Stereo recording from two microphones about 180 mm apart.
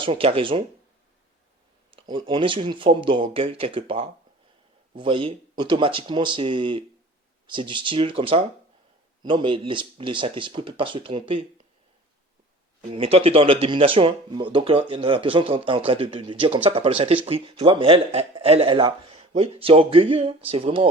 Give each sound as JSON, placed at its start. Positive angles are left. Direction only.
{"t": 0.0, "sound": "speech", "side_deg": -30}
{"t": 1.9, "sound": "speech", "side_deg": -30}
{"t": 12.8, "sound": "speech", "side_deg": -30}